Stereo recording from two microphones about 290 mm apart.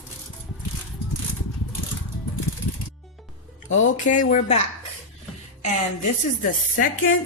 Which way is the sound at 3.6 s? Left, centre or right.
Left.